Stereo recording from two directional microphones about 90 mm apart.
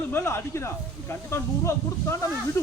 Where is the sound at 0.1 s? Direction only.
25° left (ahead or behind).